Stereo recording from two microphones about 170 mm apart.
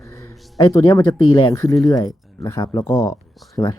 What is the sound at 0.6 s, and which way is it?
Speech, 20° left (ahead or behind).